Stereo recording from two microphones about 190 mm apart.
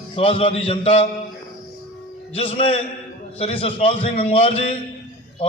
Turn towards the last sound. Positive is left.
turn(degrees=30)  # may be behind; listen again after turning